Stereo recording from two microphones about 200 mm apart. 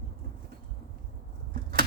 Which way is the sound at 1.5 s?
50° right (ahead or behind).